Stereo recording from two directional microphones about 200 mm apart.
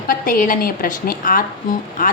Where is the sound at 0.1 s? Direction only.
45° left (ahead or behind).